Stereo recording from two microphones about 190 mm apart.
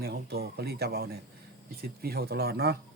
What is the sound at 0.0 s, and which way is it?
A man's voice, 55° right (ahead or behind).